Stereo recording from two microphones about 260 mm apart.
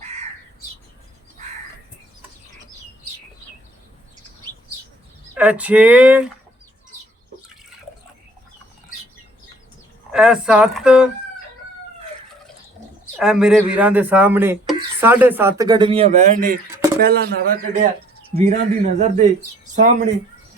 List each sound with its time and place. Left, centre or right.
0.0 s bird: right
5.3 s speech: centre
10.1 s speech: centre
13.1 s a man's voice: centre; by 19.3 s right